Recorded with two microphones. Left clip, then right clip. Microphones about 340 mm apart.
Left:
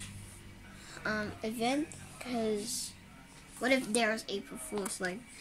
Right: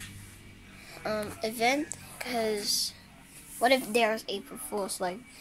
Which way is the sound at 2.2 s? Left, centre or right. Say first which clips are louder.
Right 5 dB; centre.